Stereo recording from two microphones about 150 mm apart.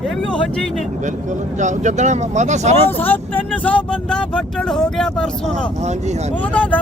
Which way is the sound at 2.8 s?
10° left (ahead or behind).